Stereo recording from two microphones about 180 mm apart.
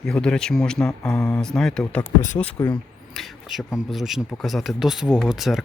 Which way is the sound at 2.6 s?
15° left (ahead or behind).